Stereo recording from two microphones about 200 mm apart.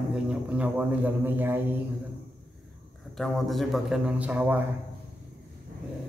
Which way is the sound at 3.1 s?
Centre (ahead or behind).